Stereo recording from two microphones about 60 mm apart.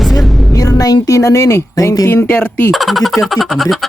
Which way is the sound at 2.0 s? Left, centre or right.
Left.